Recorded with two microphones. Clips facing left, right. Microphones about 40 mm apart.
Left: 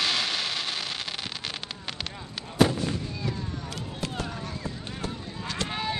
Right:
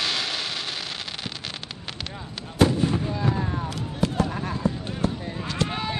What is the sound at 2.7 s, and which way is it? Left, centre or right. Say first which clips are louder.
Fireworks: right 6 dB; right.